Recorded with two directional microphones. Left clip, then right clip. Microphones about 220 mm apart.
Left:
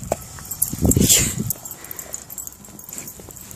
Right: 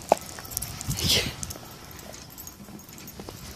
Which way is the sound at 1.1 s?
10° left (ahead or behind).